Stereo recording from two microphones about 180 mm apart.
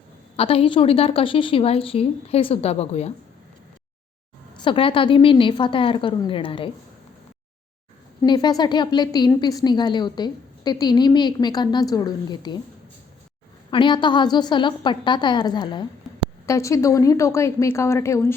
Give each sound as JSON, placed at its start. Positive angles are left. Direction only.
{"t": 0.3, "sound": "a woman's voice", "side_deg": 30}
{"t": 4.6, "sound": "a woman's voice", "side_deg": 30}
{"t": 8.2, "sound": "a woman's voice", "side_deg": 20}
{"t": 13.7, "sound": "a woman's voice", "side_deg": 25}